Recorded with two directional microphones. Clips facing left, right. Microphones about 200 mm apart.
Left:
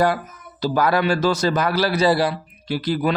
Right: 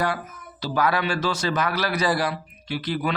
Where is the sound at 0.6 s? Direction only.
40° left (ahead or behind).